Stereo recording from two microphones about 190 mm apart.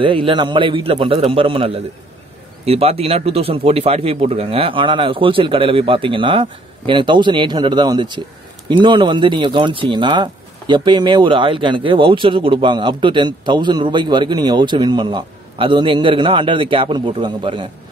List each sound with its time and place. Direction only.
0.0 s speech: 25° right (ahead or behind)